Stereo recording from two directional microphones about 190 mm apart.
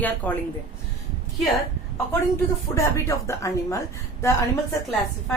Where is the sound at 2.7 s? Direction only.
15° left (ahead or behind).